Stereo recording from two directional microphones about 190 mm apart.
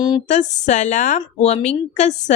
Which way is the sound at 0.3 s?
40° left (ahead or behind).